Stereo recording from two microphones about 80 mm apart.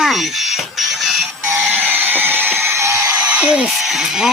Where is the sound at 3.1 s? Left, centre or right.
Centre.